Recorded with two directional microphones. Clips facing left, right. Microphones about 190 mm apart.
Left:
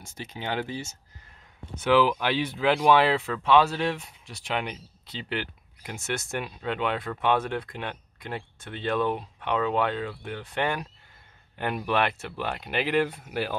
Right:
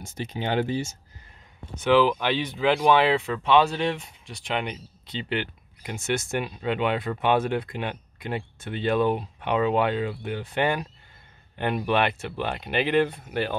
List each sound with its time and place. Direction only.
0.1 s speech: 20° right (ahead or behind)
1.8 s speech: 10° left (ahead or behind)